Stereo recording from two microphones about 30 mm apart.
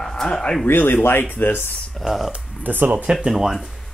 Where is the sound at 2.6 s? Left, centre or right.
Right.